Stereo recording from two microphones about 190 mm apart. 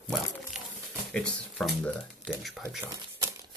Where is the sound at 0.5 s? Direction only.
5° right (ahead or behind).